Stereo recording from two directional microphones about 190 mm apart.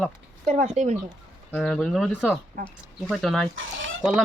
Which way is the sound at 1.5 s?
5° left (ahead or behind).